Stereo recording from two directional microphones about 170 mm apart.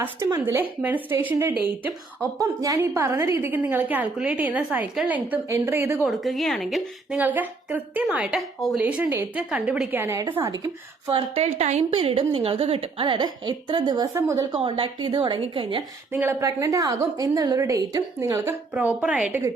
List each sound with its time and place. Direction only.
0.4 s a woman's voice: 10° right (ahead or behind)
6.1 s a woman's voice: centre (ahead or behind)
10.0 s a woman's voice: 15° right (ahead or behind)
11.1 s a woman's voice: 35° right (ahead or behind); by 14.6 s 20° right (ahead or behind)
14.6 s a woman's voice: 30° right (ahead or behind)
16.1 s a woman's voice: 15° right (ahead or behind)